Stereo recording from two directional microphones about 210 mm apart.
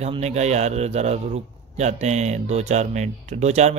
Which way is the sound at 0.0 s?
30° right (ahead or behind).